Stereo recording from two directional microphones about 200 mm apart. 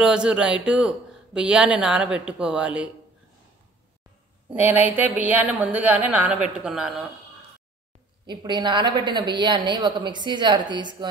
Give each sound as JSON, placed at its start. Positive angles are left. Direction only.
{"t": 0.0, "sound": "speech", "side_deg": -5}
{"t": 4.5, "sound": "speech", "side_deg": -10}
{"t": 8.3, "sound": "a woman's voice", "side_deg": -20}